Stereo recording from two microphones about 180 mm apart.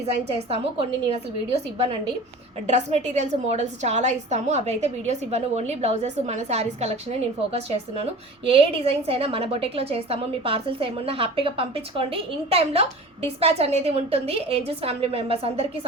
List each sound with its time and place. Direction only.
0.0 s a woman's voice: 35° right (ahead or behind)
2.6 s a woman's voice: 40° right (ahead or behind)